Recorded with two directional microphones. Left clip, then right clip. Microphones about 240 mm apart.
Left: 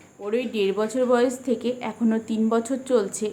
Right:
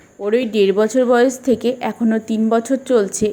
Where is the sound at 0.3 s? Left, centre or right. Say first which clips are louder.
Right 9 dB; right.